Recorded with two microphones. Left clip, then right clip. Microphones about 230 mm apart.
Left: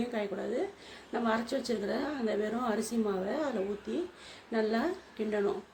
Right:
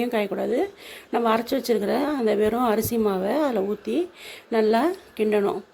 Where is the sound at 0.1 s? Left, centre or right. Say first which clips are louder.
Right 10 dB; right.